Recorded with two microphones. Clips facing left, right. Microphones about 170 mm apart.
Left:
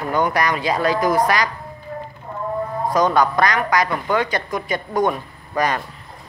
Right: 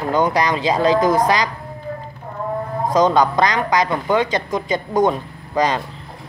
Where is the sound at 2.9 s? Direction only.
20° right (ahead or behind).